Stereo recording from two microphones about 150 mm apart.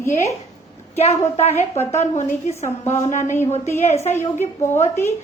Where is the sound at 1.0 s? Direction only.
45° left (ahead or behind).